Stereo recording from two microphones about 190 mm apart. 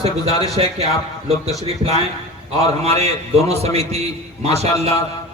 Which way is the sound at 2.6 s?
35° right (ahead or behind).